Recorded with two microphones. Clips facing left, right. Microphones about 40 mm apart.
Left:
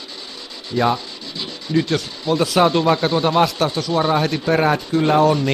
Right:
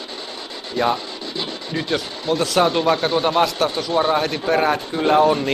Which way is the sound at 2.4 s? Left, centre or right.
Centre.